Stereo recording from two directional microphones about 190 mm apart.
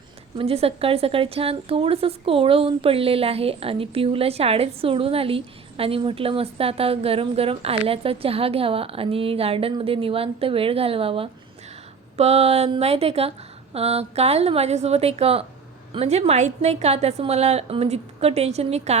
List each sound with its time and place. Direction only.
0.3 s a woman's voice: 30° right (ahead or behind)